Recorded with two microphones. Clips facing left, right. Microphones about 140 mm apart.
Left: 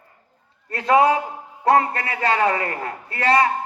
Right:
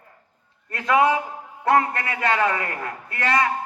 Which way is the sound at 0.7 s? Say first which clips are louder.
Left 3 dB; 35° left (ahead or behind).